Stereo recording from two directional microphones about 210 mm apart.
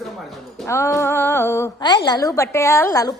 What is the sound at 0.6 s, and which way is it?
A woman's voice, 15° left (ahead or behind).